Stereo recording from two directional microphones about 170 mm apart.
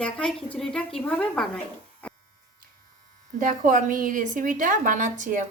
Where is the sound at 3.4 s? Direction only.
50° right (ahead or behind).